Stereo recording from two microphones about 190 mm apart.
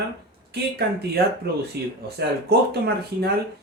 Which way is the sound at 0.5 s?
60° right (ahead or behind).